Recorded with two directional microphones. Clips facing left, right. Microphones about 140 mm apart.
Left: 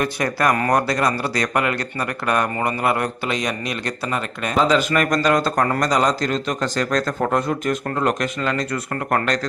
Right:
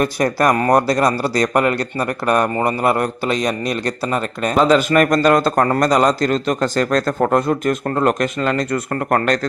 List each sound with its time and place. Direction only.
0.0 s speech: 40° right (ahead or behind)